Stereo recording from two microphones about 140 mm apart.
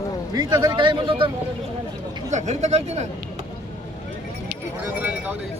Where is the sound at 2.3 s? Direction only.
55° right (ahead or behind).